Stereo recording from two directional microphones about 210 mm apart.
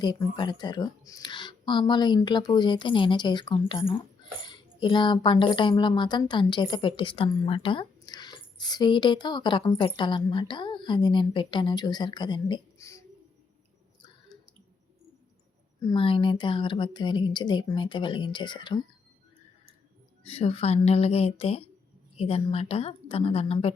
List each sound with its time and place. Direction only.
0.0 s speech: 20° left (ahead or behind)
15.8 s speech: 20° left (ahead or behind)
20.2 s speech: 30° left (ahead or behind)